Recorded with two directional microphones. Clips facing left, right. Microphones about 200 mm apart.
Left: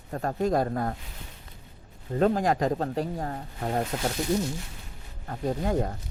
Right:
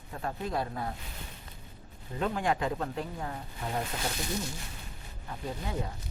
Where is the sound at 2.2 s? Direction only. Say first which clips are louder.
Left 7 dB; 40° left (ahead or behind).